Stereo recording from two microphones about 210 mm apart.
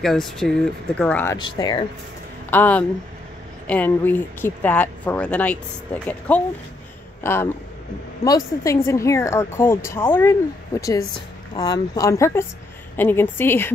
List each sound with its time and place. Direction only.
0.0 s speech: centre (ahead or behind); by 1.9 s 20° left (ahead or behind)
2.5 s speech: 10° left (ahead or behind)